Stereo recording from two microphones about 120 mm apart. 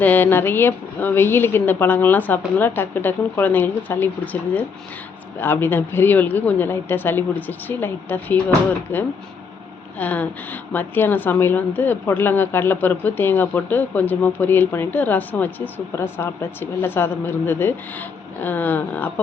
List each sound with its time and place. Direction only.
0.0 s a woman's voice: 15° left (ahead or behind)